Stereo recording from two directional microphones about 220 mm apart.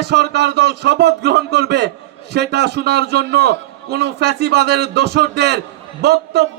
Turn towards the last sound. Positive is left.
turn(degrees=-50)  # may be behind; listen again after turning